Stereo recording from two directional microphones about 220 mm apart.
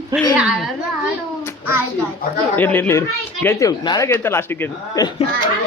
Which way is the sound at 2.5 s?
10° left (ahead or behind).